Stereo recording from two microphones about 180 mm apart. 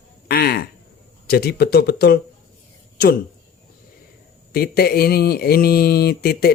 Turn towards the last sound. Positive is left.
turn(degrees=60)  # may be behind; listen again after turning